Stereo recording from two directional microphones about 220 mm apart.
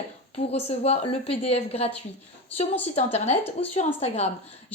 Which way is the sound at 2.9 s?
30° left (ahead or behind).